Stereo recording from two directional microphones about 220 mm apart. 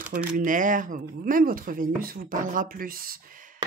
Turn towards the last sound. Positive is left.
turn(degrees=-40)  # may be behind; listen again after turning